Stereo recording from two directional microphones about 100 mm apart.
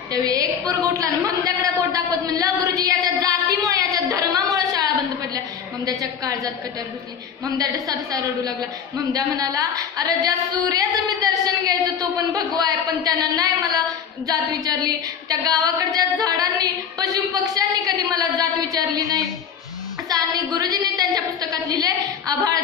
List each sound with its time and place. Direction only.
0.1 s a woman's voice: 40° right (ahead or behind)
2.6 s a sound: 35° right (ahead or behind)
5.9 s a woman's voice: 35° right (ahead or behind)
7.5 s a woman's voice: 40° right (ahead or behind)
15.4 s music: 40° right (ahead or behind)
20.1 s a sound: 40° right (ahead or behind)